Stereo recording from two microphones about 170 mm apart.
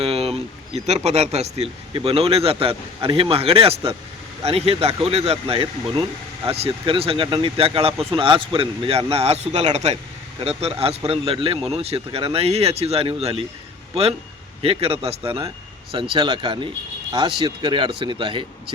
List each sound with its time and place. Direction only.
0.0 s speech: 35° right (ahead or behind)
16.1 s speech: 25° right (ahead or behind)